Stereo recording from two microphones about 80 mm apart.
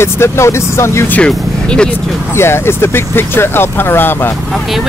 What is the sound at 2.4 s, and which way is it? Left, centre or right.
Speech, left.